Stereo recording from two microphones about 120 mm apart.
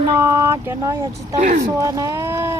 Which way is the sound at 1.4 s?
85° right.